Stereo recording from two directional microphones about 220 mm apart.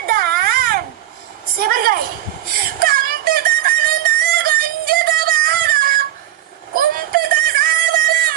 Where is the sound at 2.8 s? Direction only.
40° right (ahead or behind).